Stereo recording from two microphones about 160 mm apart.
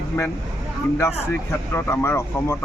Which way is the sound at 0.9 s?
15° left (ahead or behind).